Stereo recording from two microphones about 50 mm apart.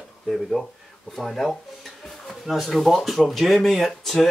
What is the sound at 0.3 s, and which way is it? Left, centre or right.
Speech, centre.